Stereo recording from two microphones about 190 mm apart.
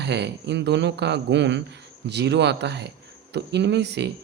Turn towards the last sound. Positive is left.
turn(degrees=-65)  # may be behind; listen again after turning